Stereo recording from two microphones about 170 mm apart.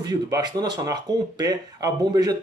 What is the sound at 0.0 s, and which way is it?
Speech, 25° right (ahead or behind).